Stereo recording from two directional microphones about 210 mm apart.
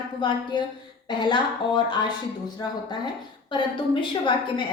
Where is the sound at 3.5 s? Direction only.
25° left (ahead or behind).